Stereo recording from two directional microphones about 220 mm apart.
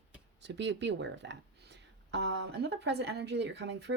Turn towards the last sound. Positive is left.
turn(degrees=-50)  # may be behind; listen again after turning